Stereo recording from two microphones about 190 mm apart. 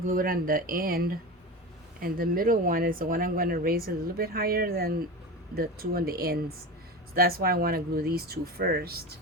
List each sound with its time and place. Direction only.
0.1 s speech: 50° right (ahead or behind)